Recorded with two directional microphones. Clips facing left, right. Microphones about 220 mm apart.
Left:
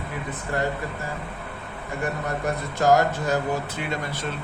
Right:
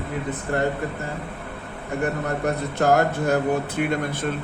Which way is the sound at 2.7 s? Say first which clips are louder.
Left 1 dB; 60° right (ahead or behind).